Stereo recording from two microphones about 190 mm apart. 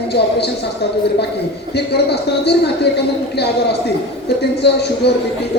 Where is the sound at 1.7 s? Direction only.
60° left (ahead or behind).